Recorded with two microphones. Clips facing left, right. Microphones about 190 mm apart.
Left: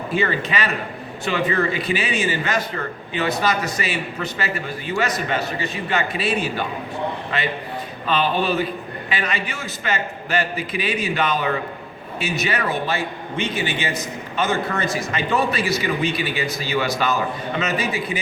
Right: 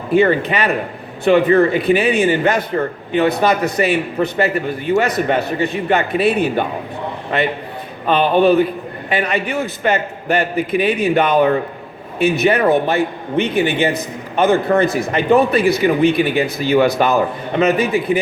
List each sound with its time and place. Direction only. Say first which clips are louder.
0.1 s a man's voice: right 9 dB; 60° right (ahead or behind)